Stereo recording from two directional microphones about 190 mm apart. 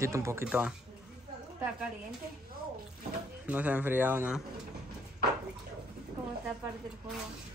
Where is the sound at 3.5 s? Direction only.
10° right (ahead or behind).